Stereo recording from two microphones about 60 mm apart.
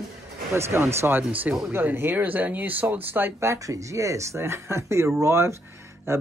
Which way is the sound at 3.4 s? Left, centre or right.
Right.